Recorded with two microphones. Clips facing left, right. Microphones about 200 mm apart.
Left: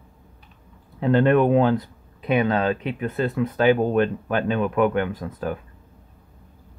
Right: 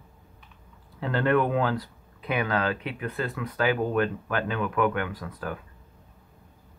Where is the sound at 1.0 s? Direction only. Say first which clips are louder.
Left 6 dB; 20° left (ahead or behind).